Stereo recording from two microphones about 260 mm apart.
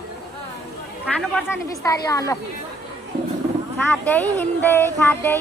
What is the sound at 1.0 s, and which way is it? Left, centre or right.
Speech, centre.